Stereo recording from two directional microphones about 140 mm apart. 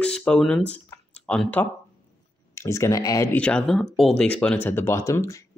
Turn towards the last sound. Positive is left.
turn(degrees=20)  # may be behind; listen again after turning